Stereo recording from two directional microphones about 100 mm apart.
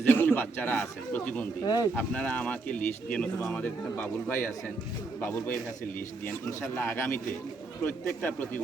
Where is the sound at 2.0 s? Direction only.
15° left (ahead or behind).